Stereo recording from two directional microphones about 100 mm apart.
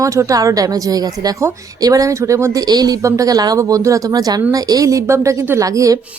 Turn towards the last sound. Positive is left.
turn(degrees=-35)  # may be behind; listen again after turning